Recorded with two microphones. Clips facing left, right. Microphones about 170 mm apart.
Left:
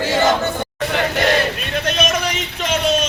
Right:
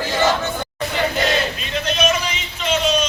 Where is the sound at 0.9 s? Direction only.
60° left (ahead or behind).